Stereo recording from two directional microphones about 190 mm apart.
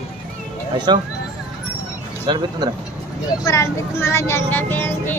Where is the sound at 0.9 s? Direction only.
25° right (ahead or behind).